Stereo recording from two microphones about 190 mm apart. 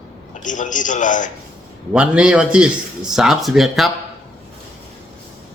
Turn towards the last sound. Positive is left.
turn(degrees=0)  # may be behind; listen again after turning